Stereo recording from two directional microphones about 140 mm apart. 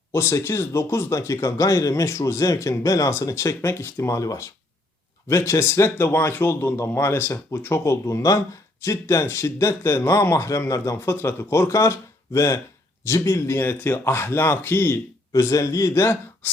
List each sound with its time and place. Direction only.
0.1 s speech: 20° left (ahead or behind)